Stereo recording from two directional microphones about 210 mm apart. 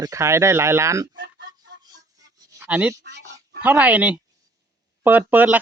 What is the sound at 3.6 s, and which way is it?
Speech, 5° right (ahead or behind).